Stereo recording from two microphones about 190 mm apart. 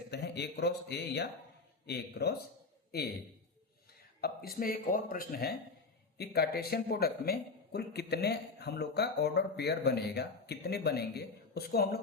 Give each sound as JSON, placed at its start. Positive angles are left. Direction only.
{"t": 0.1, "sound": "speech", "side_deg": 60}
{"t": 4.2, "sound": "speech", "side_deg": 55}